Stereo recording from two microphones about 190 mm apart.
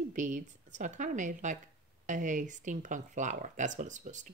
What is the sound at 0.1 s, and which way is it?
Speech, 40° right (ahead or behind).